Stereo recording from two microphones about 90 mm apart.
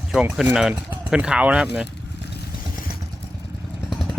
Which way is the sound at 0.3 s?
5° right (ahead or behind).